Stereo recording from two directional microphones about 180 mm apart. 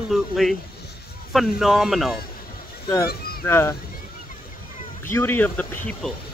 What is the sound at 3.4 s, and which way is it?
Speech, 15° left (ahead or behind).